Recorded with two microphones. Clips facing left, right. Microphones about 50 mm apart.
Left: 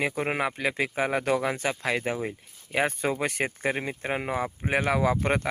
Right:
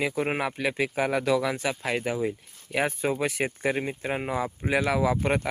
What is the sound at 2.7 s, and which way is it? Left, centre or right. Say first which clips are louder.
Speech: even; left.